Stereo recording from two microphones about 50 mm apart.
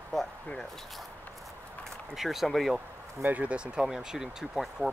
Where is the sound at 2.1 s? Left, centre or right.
Centre.